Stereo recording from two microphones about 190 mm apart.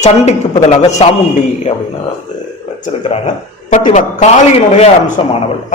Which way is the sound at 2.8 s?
35° left (ahead or behind).